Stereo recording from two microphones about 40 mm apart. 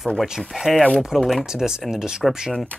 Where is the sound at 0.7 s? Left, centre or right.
Centre.